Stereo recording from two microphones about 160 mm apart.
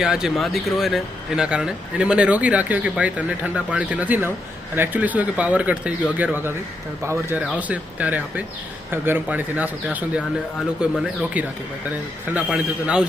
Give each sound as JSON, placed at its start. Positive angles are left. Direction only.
{"t": 0.0, "sound": "a man's voice", "side_deg": -5}